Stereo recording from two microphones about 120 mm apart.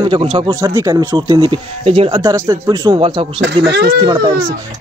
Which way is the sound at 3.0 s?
45° right (ahead or behind).